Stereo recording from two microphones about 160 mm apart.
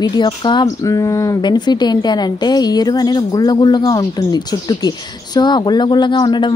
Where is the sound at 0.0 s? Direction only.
30° left (ahead or behind).